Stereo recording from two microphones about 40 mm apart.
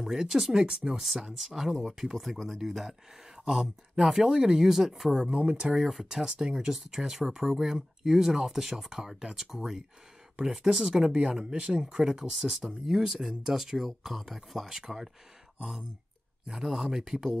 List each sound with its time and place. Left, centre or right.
0.0 s speech: centre
1.4 s speech: centre
5.3 s speech: right
5.8 s speech: centre
6.2 s speech: right
6.7 s speech: centre
11.1 s speech: right
16.4 s speech: centre